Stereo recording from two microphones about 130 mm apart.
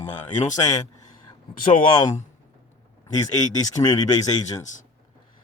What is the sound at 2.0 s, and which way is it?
Speech, 70° left (ahead or behind).